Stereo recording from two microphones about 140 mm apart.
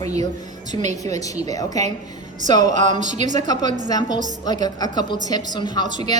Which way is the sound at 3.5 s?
30° left (ahead or behind).